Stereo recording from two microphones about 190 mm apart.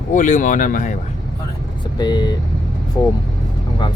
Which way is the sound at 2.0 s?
20° left (ahead or behind).